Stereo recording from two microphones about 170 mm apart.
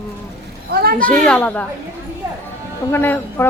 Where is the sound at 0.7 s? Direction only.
60° right (ahead or behind).